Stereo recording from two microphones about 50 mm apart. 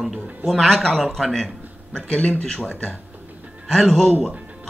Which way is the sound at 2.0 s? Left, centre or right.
Left.